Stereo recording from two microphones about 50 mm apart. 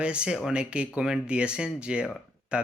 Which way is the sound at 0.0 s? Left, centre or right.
Right.